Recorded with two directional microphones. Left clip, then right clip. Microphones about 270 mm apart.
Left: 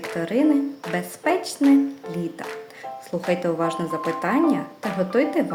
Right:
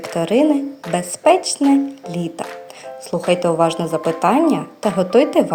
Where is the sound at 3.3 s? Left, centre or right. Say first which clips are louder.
Right 7 dB; centre.